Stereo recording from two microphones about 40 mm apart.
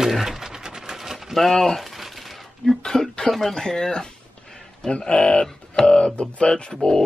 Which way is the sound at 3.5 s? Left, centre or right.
Centre.